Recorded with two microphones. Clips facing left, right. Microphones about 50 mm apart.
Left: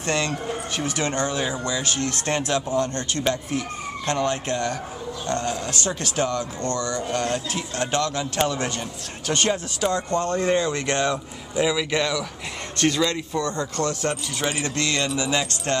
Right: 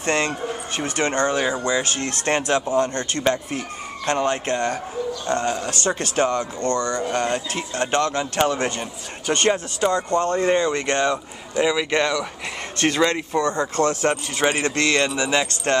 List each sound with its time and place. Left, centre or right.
0.0 s speech: right
1.2 s speech: right
12.7 s speech: right
13.4 s speech: centre
13.7 s speech: right